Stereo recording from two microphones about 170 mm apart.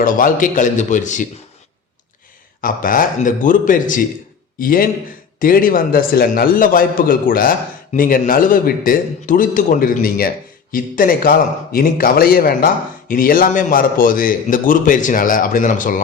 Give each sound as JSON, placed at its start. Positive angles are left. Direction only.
{"t": 0.0, "sound": "a man's voice", "side_deg": 55}
{"t": 2.6, "sound": "a man's voice", "side_deg": 55}